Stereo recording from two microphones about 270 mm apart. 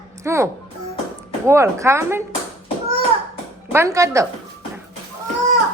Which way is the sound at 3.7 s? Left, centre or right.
Centre.